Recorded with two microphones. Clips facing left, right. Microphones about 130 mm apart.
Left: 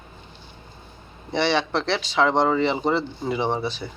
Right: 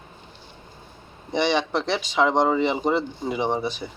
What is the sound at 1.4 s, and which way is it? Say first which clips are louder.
Speech: even; 15° right (ahead or behind).